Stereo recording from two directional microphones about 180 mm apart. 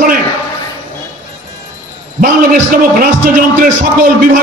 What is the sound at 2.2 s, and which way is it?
A man's voice, 50° right (ahead or behind).